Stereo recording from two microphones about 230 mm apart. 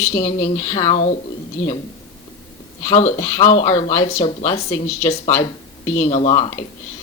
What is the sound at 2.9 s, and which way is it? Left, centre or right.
A woman's voice, left.